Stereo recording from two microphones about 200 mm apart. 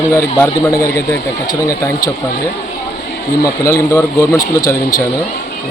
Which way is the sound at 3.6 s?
15° left (ahead or behind).